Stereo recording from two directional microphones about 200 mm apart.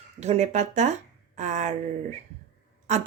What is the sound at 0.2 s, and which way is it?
Speech, 35° right (ahead or behind).